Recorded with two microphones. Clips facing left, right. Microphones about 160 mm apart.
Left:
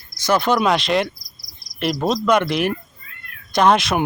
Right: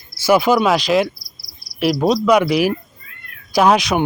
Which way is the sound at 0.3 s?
5° right (ahead or behind).